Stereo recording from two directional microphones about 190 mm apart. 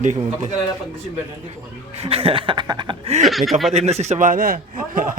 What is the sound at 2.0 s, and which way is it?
A man's voice, 30° right (ahead or behind).